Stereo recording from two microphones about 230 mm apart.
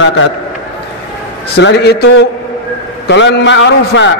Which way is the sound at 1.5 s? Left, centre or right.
Left.